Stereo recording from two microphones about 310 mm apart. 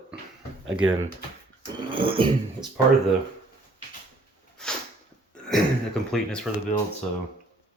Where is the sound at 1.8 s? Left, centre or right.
Centre.